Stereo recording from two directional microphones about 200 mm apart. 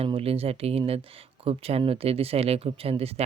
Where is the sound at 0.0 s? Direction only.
30° right (ahead or behind).